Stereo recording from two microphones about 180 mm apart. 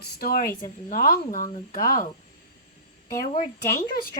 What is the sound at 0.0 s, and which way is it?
Speech, 55° left (ahead or behind).